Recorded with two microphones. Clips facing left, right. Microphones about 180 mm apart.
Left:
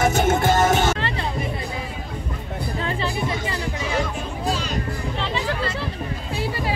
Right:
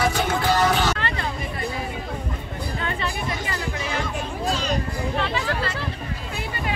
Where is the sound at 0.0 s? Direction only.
45° left (ahead or behind).